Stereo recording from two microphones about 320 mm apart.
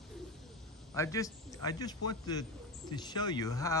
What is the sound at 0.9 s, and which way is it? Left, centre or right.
A man's voice, centre.